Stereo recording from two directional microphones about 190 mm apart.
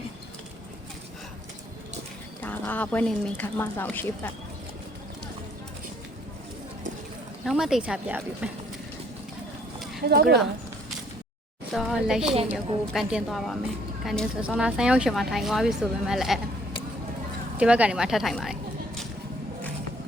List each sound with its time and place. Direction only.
2.4 s speech: 10° left (ahead or behind)
7.4 s a woman's voice: centre (ahead or behind)
10.1 s speech: 55° right (ahead or behind)
11.7 s a woman's voice: centre (ahead or behind)
17.6 s a woman's voice: 5° right (ahead or behind)